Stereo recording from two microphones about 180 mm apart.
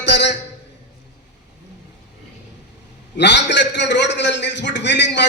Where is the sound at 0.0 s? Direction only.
75° left (ahead or behind).